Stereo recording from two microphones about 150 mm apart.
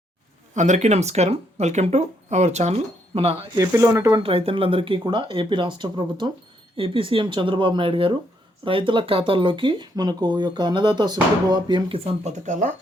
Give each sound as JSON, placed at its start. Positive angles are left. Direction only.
{"t": 0.5, "sound": "speech", "side_deg": -50}
{"t": 3.6, "sound": "speech", "side_deg": -20}
{"t": 4.2, "sound": "speech", "side_deg": -40}